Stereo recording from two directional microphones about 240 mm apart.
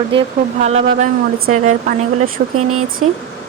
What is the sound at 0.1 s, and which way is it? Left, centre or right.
Speech, right.